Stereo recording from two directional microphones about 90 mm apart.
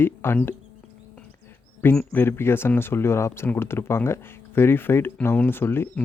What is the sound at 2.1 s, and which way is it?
Speech, 25° left (ahead or behind).